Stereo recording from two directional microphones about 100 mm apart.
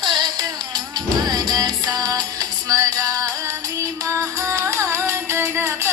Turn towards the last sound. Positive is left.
turn(degrees=-25)  # may be behind; listen again after turning